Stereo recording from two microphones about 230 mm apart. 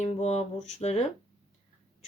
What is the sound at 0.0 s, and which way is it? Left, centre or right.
Speech, left.